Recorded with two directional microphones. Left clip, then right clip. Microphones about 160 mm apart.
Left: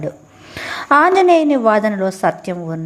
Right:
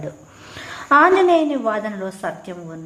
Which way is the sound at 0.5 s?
40° left (ahead or behind).